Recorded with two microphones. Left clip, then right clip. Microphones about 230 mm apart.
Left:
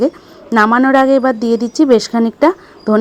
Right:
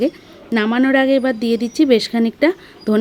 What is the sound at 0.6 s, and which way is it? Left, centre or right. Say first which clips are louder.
Speech: left 7 dB; centre.